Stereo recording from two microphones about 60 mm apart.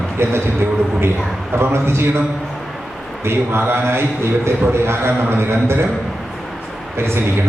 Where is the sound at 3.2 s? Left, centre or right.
Right.